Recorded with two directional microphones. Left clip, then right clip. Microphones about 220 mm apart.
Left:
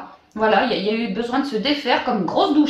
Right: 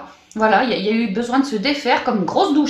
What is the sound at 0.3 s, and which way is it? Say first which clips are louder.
Speech: right 2 dB; 40° right (ahead or behind).